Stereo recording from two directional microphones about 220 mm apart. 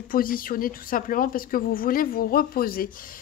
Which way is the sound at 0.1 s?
40° left (ahead or behind).